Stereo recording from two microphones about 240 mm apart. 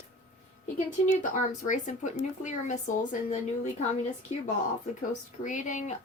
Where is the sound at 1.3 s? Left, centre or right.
Left.